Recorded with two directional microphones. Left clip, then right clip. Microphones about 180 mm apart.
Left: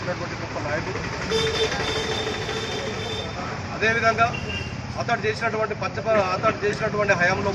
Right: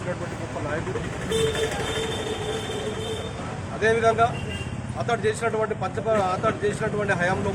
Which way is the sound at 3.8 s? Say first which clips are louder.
Even; 10° right (ahead or behind).